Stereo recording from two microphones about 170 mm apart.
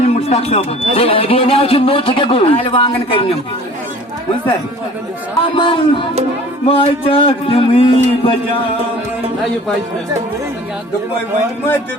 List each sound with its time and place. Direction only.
0.0 s a man's voice: 35° left (ahead or behind)
5.4 s a man's voice: 30° left (ahead or behind)